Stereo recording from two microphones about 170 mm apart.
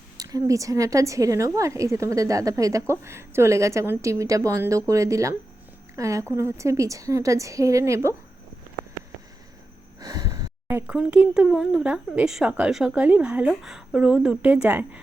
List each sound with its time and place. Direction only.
0.2 s a woman's voice: 20° right (ahead or behind)
10.0 s gasp: 20° right (ahead or behind)
10.7 s speech: 10° right (ahead or behind)